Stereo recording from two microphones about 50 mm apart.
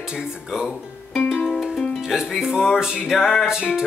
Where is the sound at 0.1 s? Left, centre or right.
Centre.